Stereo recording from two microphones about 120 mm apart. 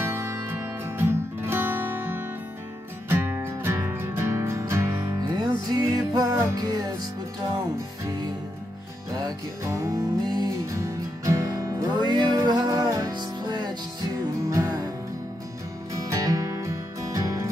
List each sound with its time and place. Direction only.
0.0 s music: 20° right (ahead or behind)
9.2 s music: 25° right (ahead or behind)
15.9 s music: 30° right (ahead or behind)